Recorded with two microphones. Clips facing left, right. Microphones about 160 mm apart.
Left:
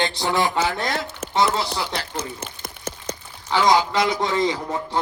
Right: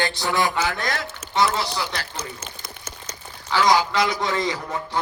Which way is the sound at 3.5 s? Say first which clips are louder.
Left 1 dB; 25° left (ahead or behind).